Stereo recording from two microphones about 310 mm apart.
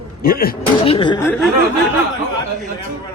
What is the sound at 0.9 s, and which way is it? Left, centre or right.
Speech, centre.